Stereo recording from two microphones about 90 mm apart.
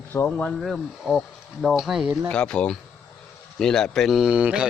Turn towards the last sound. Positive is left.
turn(degrees=-10)  # may be behind; listen again after turning